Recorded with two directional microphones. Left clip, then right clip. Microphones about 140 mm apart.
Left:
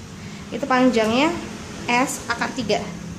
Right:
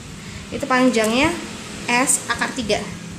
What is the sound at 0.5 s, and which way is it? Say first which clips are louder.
A woman's voice: right 1 dB; 5° right (ahead or behind).